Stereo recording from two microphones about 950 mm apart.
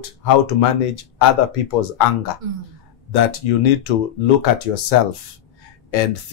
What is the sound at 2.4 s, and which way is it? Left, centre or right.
Speech, right.